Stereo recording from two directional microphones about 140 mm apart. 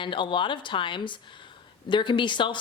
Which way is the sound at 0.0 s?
35° left (ahead or behind).